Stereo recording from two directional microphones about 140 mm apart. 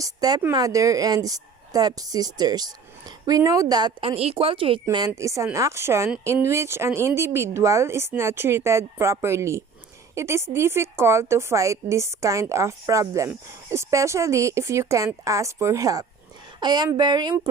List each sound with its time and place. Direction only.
0.0 s a woman's voice: 25° right (ahead or behind)